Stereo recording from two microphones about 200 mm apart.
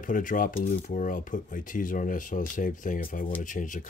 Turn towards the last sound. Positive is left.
turn(degrees=40)  # may be behind; listen again after turning